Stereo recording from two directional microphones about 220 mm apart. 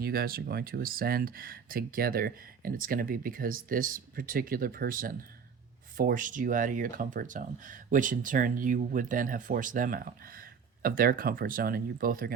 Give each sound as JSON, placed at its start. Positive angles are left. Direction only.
{"t": 0.0, "sound": "speech", "side_deg": -45}